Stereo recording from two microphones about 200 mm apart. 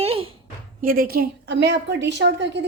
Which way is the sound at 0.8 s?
45° right (ahead or behind).